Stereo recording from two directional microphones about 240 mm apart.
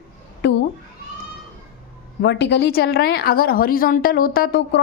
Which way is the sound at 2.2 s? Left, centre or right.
Left.